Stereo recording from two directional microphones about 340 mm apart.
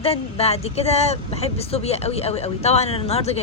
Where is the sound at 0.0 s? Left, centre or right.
Centre.